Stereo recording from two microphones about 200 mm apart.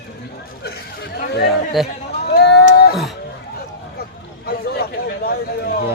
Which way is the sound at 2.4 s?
55° left (ahead or behind).